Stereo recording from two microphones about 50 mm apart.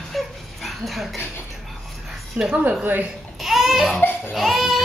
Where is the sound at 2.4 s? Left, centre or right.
Right.